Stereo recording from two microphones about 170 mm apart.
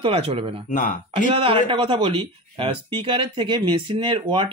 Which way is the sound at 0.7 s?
50° left (ahead or behind).